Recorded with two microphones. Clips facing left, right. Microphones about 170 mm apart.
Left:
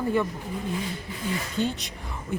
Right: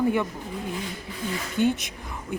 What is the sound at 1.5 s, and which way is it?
Speech, 15° right (ahead or behind).